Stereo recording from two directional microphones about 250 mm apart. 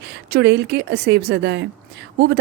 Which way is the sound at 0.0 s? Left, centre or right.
Right.